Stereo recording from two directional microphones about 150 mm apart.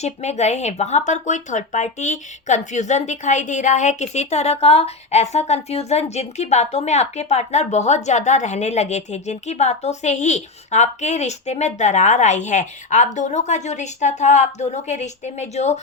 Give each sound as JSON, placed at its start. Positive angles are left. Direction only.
{"t": 0.0, "sound": "speech", "side_deg": 45}